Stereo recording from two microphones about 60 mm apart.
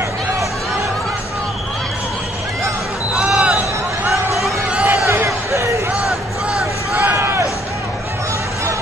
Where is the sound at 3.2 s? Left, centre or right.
Centre.